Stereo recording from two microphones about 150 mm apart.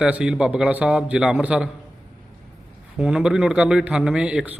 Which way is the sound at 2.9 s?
5° right (ahead or behind).